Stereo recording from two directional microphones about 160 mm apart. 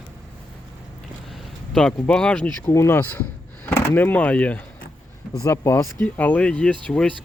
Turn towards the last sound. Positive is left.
turn(degrees=5)  # may be behind; listen again after turning